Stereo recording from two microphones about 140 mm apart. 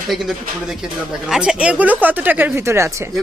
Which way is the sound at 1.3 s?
5° right (ahead or behind).